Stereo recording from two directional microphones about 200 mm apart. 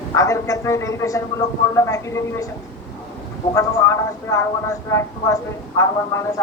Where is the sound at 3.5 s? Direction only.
15° left (ahead or behind).